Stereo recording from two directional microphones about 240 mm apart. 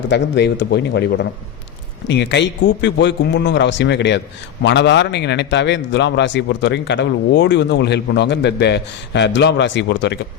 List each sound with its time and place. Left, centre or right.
0.1 s a man's voice: left